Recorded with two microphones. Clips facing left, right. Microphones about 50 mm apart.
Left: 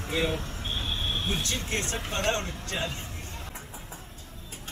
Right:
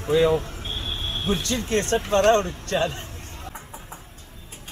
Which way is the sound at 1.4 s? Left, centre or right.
Right.